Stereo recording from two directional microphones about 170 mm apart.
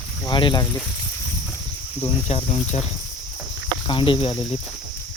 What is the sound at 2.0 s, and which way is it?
Cricket, 30° left (ahead or behind).